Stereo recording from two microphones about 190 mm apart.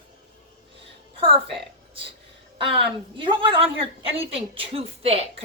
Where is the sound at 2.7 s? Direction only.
25° right (ahead or behind).